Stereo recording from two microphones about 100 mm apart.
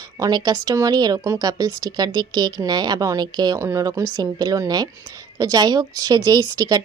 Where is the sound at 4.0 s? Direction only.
40° right (ahead or behind).